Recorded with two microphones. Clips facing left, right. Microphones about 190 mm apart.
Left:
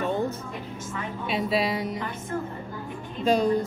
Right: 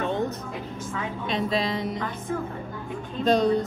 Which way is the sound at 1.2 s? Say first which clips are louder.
Left 1 dB; 5° left (ahead or behind).